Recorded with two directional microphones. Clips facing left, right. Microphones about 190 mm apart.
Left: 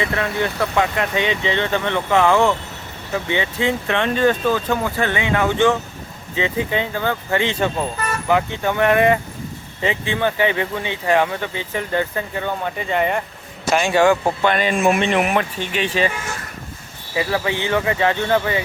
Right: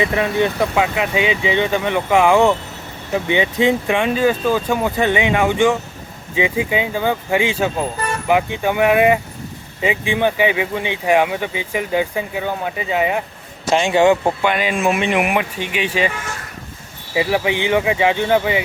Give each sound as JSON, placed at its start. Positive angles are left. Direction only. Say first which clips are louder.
{"t": 0.0, "sound": "speech", "louder": "right 4 dB", "side_deg": -15}
{"t": 13.7, "sound": "a man's voice", "louder": "right 2 dB", "side_deg": -20}
{"t": 14.4, "sound": "speech", "louder": "left 3 dB", "side_deg": -10}
{"t": 17.2, "sound": "speech", "louder": "right 3 dB", "side_deg": -15}